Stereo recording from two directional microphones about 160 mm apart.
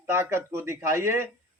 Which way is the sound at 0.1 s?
15° right (ahead or behind).